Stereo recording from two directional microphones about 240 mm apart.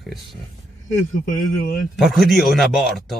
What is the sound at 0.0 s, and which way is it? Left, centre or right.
Speech, centre.